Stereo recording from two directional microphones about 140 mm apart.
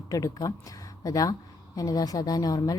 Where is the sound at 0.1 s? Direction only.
25° left (ahead or behind).